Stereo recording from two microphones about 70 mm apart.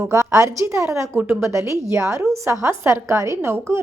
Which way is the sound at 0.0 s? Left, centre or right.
Right.